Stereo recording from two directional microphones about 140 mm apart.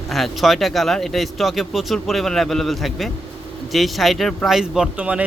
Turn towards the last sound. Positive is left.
turn(degrees=-10)  # may be behind; listen again after turning